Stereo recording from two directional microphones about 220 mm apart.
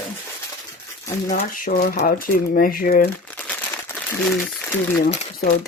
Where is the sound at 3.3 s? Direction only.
5° left (ahead or behind).